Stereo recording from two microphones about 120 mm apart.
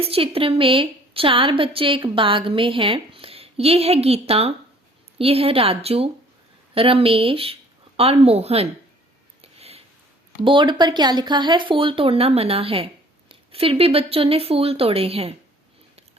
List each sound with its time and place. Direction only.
0.0 s speech: 50° right (ahead or behind)
9.4 s a sound: 55° right (ahead or behind)
10.4 s speech: 45° right (ahead or behind)